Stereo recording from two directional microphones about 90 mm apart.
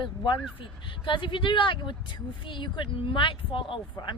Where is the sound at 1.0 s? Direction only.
65° left (ahead or behind).